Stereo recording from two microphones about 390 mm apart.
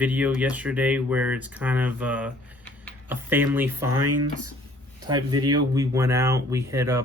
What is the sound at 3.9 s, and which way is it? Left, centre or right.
Speech, right.